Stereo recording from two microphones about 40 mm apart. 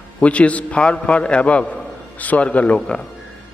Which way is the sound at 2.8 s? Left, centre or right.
Centre.